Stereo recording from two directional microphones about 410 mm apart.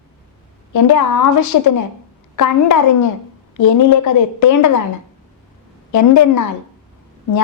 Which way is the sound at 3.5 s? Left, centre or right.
Left.